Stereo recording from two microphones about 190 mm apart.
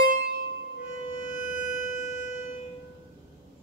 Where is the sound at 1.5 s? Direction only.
40° left (ahead or behind).